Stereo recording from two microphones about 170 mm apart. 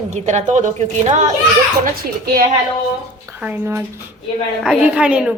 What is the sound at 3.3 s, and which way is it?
A woman's voice, 10° right (ahead or behind).